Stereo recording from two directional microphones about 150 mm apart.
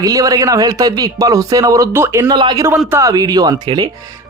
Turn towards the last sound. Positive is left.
turn(degrees=-30)  # may be behind; listen again after turning